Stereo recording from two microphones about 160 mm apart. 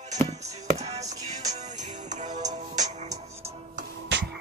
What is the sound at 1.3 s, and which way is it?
Music, 45° right (ahead or behind).